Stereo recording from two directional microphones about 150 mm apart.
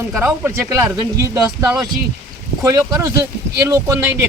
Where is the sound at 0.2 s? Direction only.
15° right (ahead or behind).